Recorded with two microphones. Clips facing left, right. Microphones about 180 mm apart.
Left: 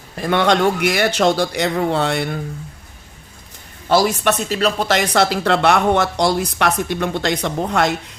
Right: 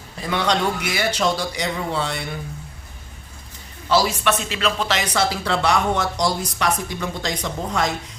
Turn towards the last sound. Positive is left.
turn(degrees=60)  # may be behind; listen again after turning